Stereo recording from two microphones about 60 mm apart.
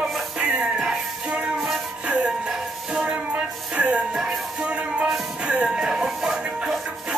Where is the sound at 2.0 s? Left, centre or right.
Centre.